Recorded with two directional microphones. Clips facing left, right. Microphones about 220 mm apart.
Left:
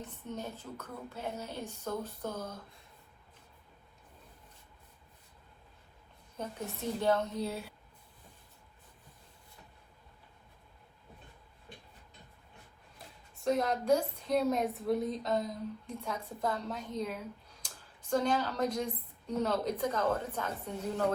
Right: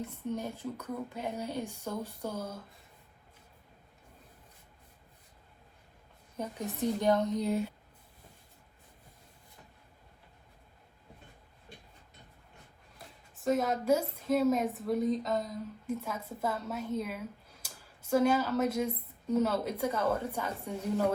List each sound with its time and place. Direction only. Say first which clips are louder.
0.1 s speech: right 5 dB; 10° right (ahead or behind)
6.3 s speech: right 3 dB; 15° right (ahead or behind)
13.3 s a woman's voice: right 1 dB; centre (ahead or behind)